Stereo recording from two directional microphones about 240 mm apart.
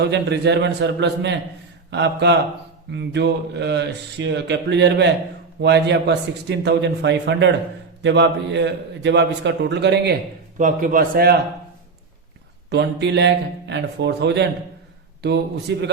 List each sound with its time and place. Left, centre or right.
0.0 s speech: right
10.6 s a man's voice: right
12.7 s speech: right
15.7 s speech: right